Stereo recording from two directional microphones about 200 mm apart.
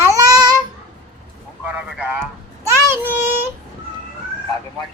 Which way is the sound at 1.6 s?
5° right (ahead or behind).